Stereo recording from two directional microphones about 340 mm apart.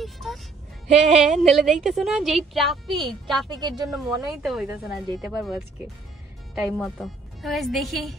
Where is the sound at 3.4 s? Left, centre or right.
Centre.